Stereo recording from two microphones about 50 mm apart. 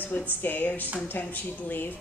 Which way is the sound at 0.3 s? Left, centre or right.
Left.